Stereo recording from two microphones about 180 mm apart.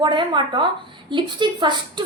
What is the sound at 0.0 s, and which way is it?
A woman's voice, 25° right (ahead or behind).